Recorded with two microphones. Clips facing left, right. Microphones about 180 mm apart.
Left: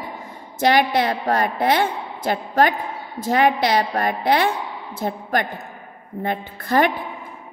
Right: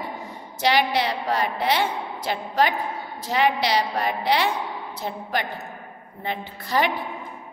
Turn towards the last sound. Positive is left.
turn(degrees=50)  # may be behind; listen again after turning